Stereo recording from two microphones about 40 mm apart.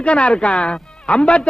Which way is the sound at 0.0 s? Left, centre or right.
Left.